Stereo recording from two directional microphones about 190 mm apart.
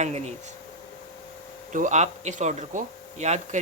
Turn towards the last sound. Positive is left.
turn(degrees=-35)  # may be behind; listen again after turning